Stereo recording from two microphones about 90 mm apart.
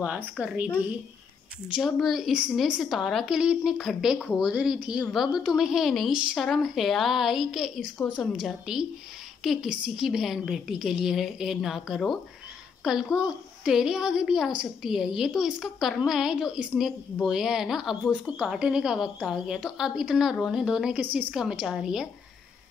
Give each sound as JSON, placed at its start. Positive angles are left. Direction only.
{"t": 0.0, "sound": "a woman's voice", "side_deg": -15}
{"t": 1.8, "sound": "a woman's voice", "side_deg": 0}
{"t": 4.4, "sound": "a woman's voice", "side_deg": -10}